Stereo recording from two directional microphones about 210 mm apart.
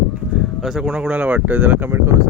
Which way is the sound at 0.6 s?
Centre (ahead or behind).